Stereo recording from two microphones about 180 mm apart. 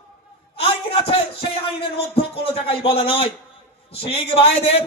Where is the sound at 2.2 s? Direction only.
30° left (ahead or behind).